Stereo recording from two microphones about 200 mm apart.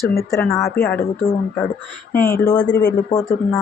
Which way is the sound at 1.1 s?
30° left (ahead or behind).